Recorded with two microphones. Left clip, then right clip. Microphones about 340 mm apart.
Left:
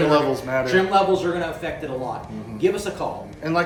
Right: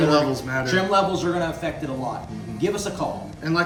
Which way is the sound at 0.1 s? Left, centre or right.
Centre.